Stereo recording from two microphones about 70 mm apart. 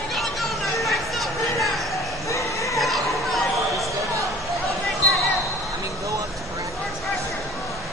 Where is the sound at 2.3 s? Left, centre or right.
Left.